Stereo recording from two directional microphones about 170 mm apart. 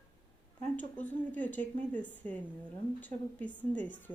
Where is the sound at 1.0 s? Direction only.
10° left (ahead or behind).